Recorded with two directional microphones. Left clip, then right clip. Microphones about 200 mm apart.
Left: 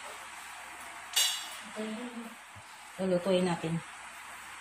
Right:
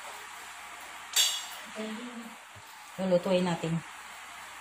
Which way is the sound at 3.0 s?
35° right (ahead or behind).